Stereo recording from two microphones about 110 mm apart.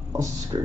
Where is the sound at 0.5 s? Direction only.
45° right (ahead or behind).